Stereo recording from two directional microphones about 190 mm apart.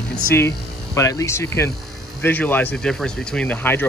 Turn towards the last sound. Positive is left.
turn(degrees=10)  # may be behind; listen again after turning